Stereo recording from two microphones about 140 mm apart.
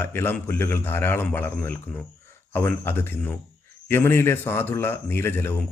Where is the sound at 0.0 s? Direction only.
15° left (ahead or behind).